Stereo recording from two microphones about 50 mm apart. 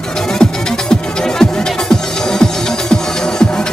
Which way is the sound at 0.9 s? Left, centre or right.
Centre.